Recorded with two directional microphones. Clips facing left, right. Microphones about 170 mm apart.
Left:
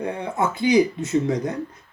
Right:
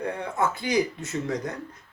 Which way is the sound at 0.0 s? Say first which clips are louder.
Left 3 dB; 20° left (ahead or behind).